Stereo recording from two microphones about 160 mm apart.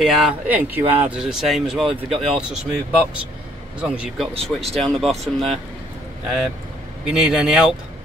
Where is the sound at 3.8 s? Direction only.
5° right (ahead or behind).